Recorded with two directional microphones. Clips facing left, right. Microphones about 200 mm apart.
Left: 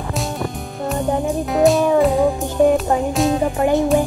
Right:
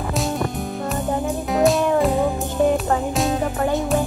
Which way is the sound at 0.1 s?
Centre (ahead or behind).